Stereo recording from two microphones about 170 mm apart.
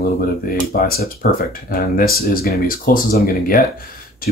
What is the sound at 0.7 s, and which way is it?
Speech, 60° left (ahead or behind).